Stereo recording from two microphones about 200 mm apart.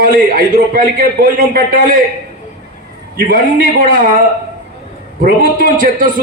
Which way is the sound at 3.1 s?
45° right (ahead or behind).